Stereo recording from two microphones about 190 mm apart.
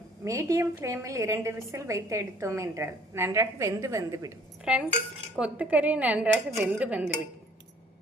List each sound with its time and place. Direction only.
0.3 s a woman's voice: 15° right (ahead or behind)
4.6 s a woman's voice: 5° right (ahead or behind)